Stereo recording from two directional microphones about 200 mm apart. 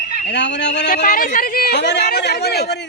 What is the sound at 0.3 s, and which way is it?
Speech, 60° left (ahead or behind).